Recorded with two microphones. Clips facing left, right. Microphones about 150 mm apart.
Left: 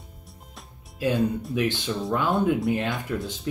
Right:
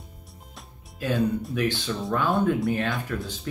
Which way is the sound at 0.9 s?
15° left (ahead or behind).